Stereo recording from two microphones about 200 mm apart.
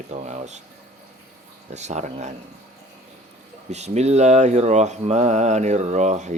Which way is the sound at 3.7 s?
35° right (ahead or behind).